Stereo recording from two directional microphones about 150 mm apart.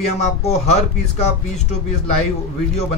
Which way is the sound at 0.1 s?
45° left (ahead or behind).